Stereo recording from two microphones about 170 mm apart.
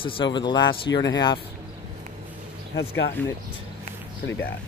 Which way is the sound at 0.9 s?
90° left.